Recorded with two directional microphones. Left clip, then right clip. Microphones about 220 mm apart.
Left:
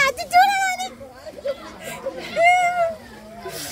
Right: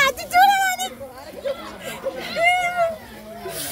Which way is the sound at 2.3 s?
15° left (ahead or behind).